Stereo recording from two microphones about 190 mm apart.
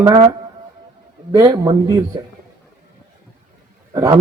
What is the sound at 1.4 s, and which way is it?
Speech, 20° right (ahead or behind).